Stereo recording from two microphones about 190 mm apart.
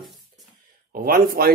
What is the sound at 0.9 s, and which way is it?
Speech, 50° right (ahead or behind).